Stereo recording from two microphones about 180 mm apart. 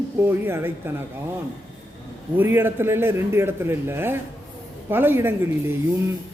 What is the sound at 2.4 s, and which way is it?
A man's voice, 10° right (ahead or behind).